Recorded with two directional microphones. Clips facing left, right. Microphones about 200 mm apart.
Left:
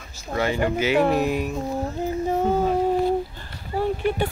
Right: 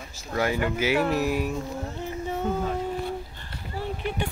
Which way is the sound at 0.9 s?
50° left (ahead or behind).